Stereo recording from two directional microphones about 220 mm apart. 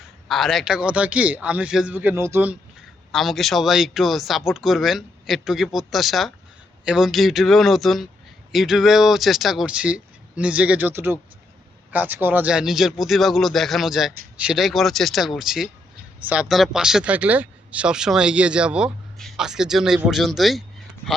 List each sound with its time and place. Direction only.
0.3 s speech: centre (ahead or behind)